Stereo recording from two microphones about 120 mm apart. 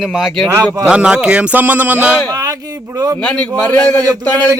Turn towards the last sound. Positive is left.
turn(degrees=10)  # may be behind; listen again after turning